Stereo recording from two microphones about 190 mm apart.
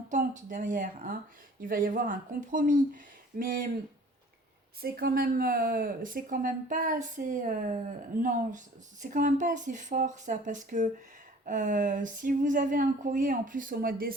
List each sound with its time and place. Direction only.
0.1 s speech: 40° right (ahead or behind)
4.8 s speech: 50° right (ahead or behind)